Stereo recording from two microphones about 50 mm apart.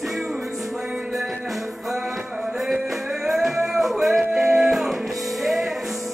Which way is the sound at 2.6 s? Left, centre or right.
Centre.